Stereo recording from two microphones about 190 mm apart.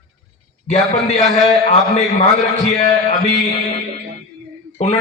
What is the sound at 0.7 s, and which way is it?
A man's voice, 35° left (ahead or behind).